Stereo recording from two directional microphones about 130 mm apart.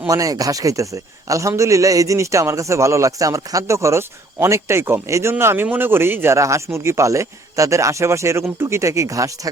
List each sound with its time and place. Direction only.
0.1 s a man's voice: 25° right (ahead or behind)